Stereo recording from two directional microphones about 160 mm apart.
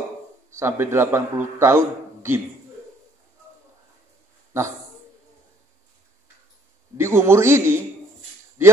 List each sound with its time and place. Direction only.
0.5 s a man's voice: 15° right (ahead or behind)
7.0 s a man's voice: 15° right (ahead or behind)